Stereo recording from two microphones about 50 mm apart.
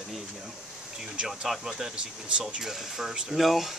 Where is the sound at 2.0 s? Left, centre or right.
Right.